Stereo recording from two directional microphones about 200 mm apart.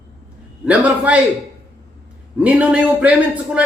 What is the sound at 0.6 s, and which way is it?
Speech, 5° right (ahead or behind).